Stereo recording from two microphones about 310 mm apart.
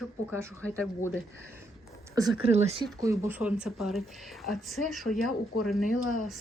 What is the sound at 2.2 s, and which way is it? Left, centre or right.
Speech, centre.